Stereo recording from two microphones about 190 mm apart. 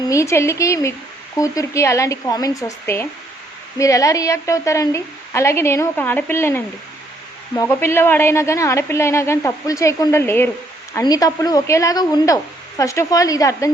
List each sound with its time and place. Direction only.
0.1 s a woman's voice: 15° left (ahead or behind)